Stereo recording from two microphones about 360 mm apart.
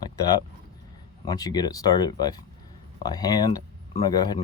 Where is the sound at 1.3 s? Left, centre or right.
Centre.